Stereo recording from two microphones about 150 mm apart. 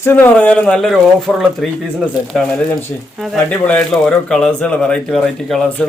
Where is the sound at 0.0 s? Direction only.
15° left (ahead or behind).